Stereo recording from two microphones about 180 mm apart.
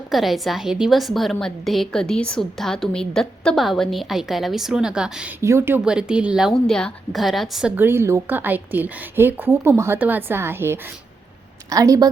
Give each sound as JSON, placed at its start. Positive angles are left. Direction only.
{"t": 0.1, "sound": "a woman's voice", "side_deg": 0}
{"t": 5.4, "sound": "a woman's voice", "side_deg": -15}